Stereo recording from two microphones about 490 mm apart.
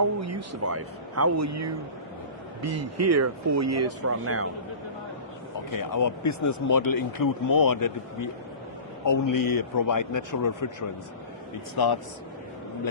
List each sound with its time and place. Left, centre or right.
0.2 s speech: right
5.5 s speech: left